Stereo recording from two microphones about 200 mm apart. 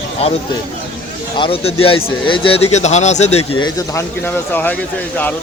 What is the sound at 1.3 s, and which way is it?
Speech, 25° left (ahead or behind).